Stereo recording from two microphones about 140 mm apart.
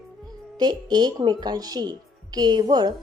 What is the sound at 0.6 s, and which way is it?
A woman's voice, 30° right (ahead or behind).